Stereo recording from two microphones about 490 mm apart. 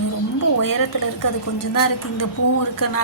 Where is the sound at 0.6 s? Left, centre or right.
Left.